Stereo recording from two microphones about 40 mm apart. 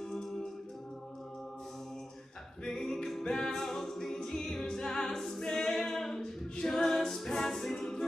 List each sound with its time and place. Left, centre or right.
0.0 s a capella: centre
2.6 s music: centre
3.1 s a capella: centre
7.8 s music: centre